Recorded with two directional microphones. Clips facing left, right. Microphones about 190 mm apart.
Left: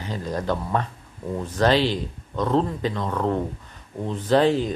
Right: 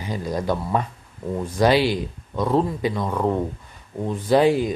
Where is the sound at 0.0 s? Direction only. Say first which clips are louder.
Right 2 dB; 10° right (ahead or behind).